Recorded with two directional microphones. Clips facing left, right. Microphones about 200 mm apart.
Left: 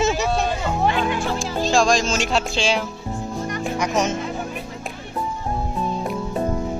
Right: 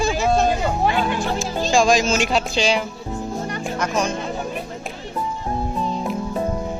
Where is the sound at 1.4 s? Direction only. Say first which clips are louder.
Right 1 dB; centre (ahead or behind).